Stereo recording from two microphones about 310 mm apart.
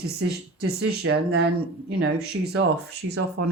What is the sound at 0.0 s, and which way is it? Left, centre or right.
Speech, right.